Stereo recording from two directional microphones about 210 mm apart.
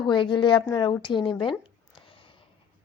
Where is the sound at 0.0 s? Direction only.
25° left (ahead or behind).